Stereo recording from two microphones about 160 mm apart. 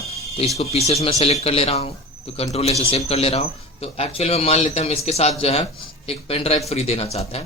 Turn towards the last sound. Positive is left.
turn(degrees=40)  # may be behind; listen again after turning